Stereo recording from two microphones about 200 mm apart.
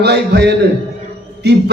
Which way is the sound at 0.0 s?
55° right (ahead or behind).